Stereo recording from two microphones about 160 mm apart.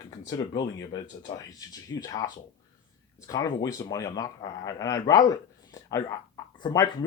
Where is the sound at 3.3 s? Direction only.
20° left (ahead or behind).